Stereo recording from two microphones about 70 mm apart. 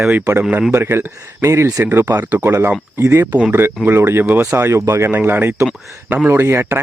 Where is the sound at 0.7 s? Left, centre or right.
Right.